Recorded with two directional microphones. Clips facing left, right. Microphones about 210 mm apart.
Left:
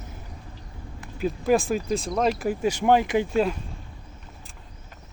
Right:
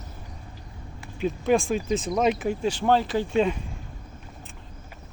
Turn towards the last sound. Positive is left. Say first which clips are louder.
# left 2 dB
turn(degrees=15)  # may be behind; listen again after turning